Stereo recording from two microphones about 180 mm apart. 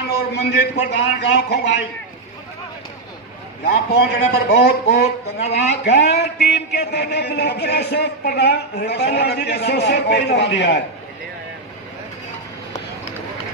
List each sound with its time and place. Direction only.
0.3 s a man's voice: 65° left (ahead or behind)
3.6 s a man's voice: 55° left (ahead or behind)